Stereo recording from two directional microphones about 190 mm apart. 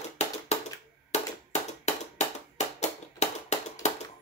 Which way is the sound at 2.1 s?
35° left (ahead or behind).